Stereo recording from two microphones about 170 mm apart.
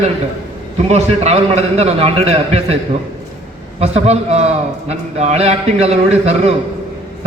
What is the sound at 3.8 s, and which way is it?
Speech, 40° right (ahead or behind).